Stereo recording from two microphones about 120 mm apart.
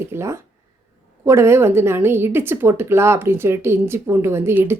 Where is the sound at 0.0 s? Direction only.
20° right (ahead or behind).